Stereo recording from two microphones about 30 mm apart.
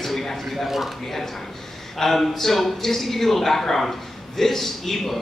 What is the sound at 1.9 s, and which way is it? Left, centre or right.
A man's voice, centre.